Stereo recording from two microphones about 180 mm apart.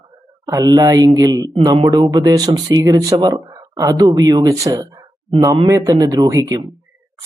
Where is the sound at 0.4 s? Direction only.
20° right (ahead or behind).